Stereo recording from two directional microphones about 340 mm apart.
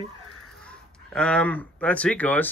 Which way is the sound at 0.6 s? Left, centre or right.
Centre.